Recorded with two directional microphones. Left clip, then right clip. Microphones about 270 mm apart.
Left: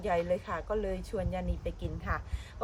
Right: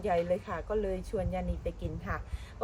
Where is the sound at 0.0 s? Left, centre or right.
Centre.